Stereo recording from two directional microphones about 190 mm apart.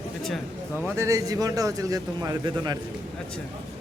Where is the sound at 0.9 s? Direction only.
15° right (ahead or behind).